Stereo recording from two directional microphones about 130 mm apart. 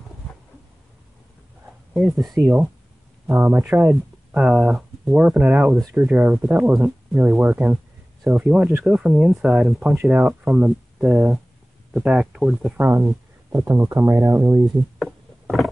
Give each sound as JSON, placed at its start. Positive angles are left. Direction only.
{"t": 2.0, "sound": "speech", "side_deg": 0}
{"t": 12.7, "sound": "speech", "side_deg": -15}
{"t": 14.6, "sound": "a sound", "side_deg": 0}